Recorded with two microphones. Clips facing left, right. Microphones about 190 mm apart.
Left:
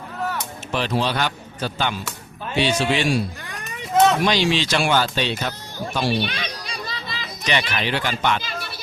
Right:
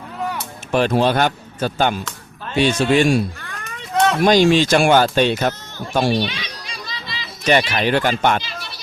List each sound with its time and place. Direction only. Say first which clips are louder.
0.7 s speech: right 7 dB; 50° right (ahead or behind)
3.4 s children playing: even; 15° left (ahead or behind)
3.9 s a sound: left 1 dB; centre (ahead or behind)
4.2 s speech: right 7 dB; 45° right (ahead or behind)
6.2 s children playing: even; 55° left (ahead or behind)
7.7 s speech: right 6 dB; 50° right (ahead or behind)